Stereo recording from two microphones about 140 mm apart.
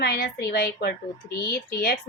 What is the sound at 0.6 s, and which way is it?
Speech, 90° left.